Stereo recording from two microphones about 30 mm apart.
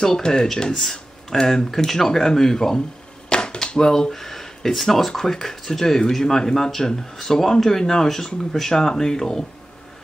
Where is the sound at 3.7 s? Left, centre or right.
Centre.